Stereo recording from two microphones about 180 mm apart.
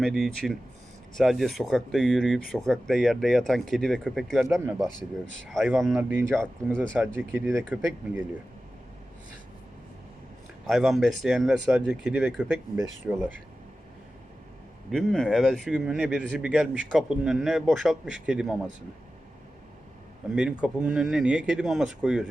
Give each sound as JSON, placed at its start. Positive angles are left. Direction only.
{"t": 0.0, "sound": "speech", "side_deg": 0}
{"t": 4.4, "sound": "speech", "side_deg": -15}
{"t": 5.2, "sound": "speech", "side_deg": 0}
{"t": 6.0, "sound": "speech", "side_deg": -10}
{"t": 10.7, "sound": "speech", "side_deg": 0}
{"t": 14.8, "sound": "speech", "side_deg": 0}
{"t": 20.3, "sound": "speech", "side_deg": -5}